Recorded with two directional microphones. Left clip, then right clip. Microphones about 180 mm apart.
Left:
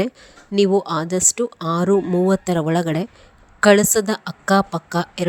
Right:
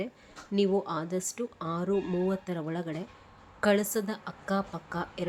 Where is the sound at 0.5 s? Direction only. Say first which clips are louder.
Left 11 dB; 45° left (ahead or behind).